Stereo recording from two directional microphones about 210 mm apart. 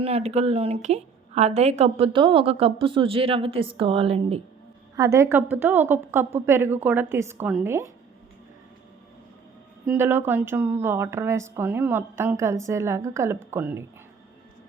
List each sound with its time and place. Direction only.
0.0 s a woman's voice: 30° right (ahead or behind)
4.9 s speech: 15° right (ahead or behind)
9.8 s speech: 5° right (ahead or behind)